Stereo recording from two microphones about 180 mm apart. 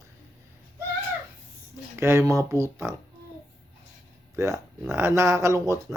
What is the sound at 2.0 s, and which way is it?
Speech, 15° right (ahead or behind).